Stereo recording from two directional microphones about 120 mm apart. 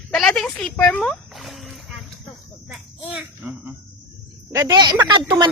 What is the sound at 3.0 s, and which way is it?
Speech, 15° right (ahead or behind).